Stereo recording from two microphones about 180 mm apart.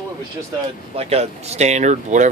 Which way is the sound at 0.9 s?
35° right (ahead or behind).